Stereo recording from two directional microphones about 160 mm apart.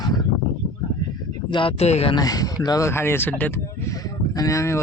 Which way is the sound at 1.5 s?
30° left (ahead or behind).